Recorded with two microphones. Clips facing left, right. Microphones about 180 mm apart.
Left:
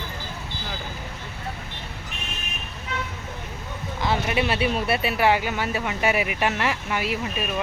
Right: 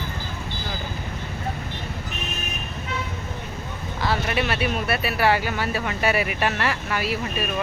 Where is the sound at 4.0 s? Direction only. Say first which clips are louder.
Even; 20° left (ahead or behind).